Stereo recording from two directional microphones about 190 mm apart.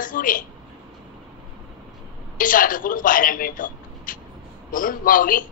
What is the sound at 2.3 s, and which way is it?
A man's voice, 45° left (ahead or behind).